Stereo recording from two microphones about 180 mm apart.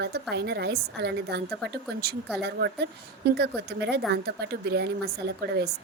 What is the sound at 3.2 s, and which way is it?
A woman's voice, 65° right (ahead or behind).